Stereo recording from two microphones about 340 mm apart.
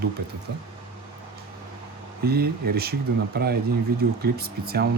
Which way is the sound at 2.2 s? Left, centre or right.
Right.